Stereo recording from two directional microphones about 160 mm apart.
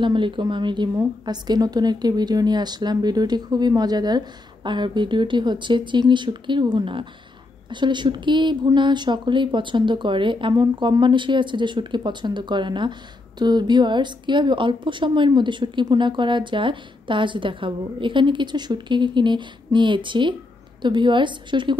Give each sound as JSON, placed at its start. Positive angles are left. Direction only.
{"t": 0.0, "sound": "speech", "side_deg": -30}